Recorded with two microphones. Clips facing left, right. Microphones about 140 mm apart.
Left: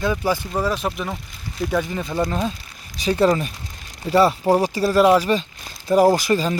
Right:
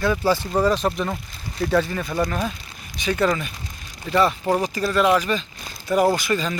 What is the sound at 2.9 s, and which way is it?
Speech, 35° left (ahead or behind).